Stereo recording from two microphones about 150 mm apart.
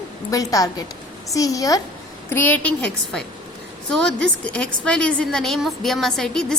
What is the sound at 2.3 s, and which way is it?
A woman's voice, 10° left (ahead or behind).